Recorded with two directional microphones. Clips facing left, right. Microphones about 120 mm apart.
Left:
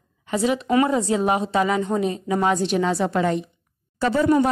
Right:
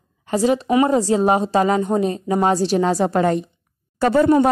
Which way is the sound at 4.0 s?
55° right (ahead or behind).